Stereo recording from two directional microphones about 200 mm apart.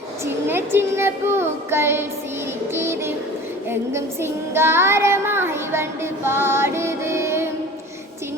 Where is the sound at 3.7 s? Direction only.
10° right (ahead or behind).